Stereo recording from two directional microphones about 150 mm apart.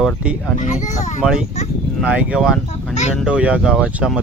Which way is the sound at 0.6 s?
55° left (ahead or behind).